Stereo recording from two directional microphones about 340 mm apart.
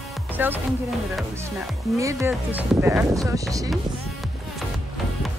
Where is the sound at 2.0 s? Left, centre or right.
Centre.